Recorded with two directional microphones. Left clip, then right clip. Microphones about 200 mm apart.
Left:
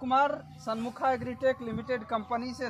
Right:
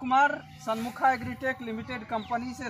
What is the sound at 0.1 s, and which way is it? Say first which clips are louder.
Speech: right 3 dB; 35° left (ahead or behind).